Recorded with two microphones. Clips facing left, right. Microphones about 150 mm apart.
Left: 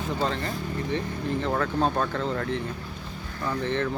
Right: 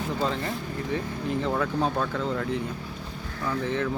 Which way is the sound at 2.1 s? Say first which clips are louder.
Even; 5° right (ahead or behind).